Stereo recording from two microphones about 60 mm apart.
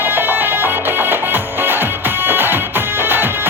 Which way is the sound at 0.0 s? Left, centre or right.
Right.